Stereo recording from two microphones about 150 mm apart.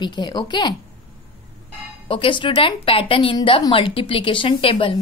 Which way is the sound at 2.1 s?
35° left (ahead or behind).